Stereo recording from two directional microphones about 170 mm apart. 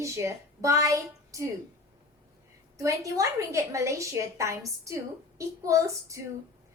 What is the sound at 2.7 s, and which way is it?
A woman's voice, 20° right (ahead or behind).